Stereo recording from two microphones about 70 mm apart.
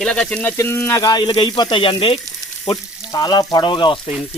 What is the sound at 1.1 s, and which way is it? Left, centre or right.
Speech, left.